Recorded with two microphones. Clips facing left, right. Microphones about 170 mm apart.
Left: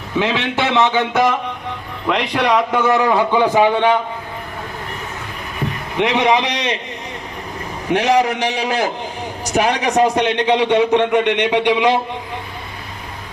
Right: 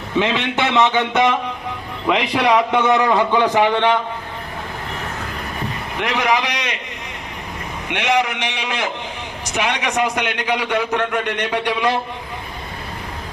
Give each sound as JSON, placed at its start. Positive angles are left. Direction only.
{"t": 0.2, "sound": "a man's voice", "side_deg": 5}
{"t": 6.0, "sound": "a man's voice", "side_deg": 25}
{"t": 7.9, "sound": "a man's voice", "side_deg": 35}